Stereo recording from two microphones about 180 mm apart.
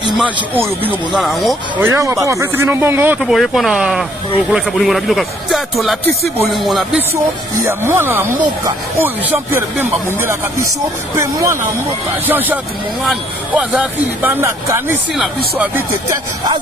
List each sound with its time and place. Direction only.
0.2 s speech: 10° right (ahead or behind)
1.8 s speech: 15° right (ahead or behind); by 7.0 s centre (ahead or behind)
7.6 s speech: 15° right (ahead or behind)